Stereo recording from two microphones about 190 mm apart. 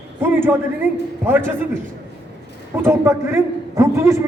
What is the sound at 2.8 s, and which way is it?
A man's voice, 15° right (ahead or behind).